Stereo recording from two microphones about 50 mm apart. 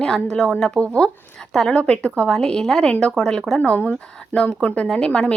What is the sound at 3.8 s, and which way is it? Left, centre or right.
Speech, left.